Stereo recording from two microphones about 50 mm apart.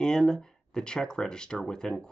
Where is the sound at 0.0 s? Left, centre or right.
Centre.